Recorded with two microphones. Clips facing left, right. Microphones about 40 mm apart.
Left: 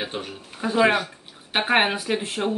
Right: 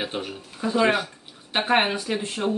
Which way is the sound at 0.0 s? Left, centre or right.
Centre.